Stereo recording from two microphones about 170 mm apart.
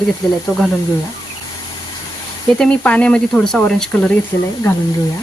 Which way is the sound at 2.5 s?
5° left (ahead or behind).